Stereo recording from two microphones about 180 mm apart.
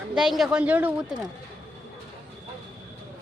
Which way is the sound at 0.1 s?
5° right (ahead or behind).